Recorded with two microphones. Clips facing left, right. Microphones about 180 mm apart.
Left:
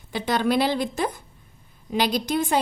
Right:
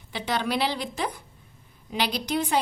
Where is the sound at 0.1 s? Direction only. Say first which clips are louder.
Left 5 dB; 45° left (ahead or behind).